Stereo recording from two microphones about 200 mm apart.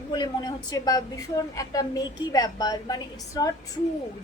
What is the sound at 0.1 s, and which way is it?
A woman's voice, 20° left (ahead or behind).